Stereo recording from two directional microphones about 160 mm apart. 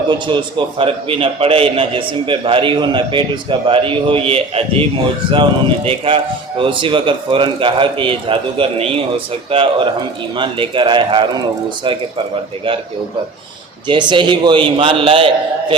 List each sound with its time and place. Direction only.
0.1 s a man's voice: 30° right (ahead or behind)
13.8 s a man's voice: 30° right (ahead or behind)